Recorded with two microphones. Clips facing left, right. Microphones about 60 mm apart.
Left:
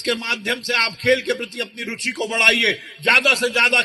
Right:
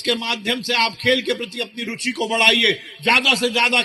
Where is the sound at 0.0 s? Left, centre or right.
Left.